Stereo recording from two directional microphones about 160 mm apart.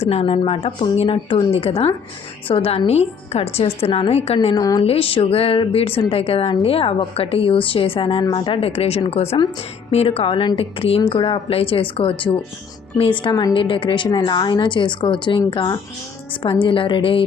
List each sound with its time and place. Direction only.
0.0 s a woman's voice: 40° left (ahead or behind)
4.5 s a woman's voice: 25° left (ahead or behind)
4.9 s a woman's voice: 35° left (ahead or behind)